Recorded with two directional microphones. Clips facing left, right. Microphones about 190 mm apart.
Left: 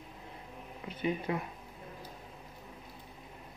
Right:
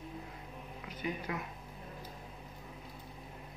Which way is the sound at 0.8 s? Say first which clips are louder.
Left 6 dB; 25° left (ahead or behind).